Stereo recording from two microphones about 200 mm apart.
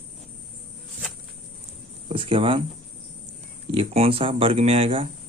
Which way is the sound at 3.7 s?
30° right (ahead or behind).